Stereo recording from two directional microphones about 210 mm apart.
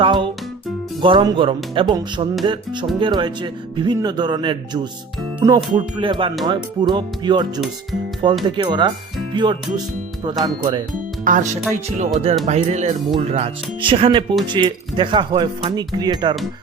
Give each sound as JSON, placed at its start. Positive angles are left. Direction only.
{"t": 0.0, "sound": "speech", "side_deg": -25}
{"t": 11.3, "sound": "speech", "side_deg": -40}